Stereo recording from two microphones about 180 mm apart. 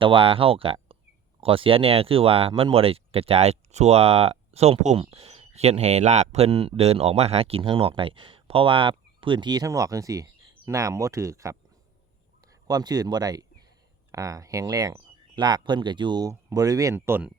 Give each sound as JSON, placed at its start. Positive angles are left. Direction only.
{"t": 0.0, "sound": "speech", "side_deg": -30}